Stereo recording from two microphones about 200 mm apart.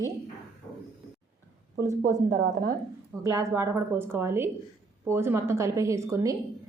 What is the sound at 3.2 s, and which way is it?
A woman's voice, 15° right (ahead or behind).